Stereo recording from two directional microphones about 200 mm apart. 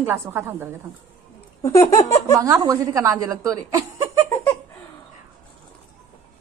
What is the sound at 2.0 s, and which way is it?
Speech, 15° left (ahead or behind).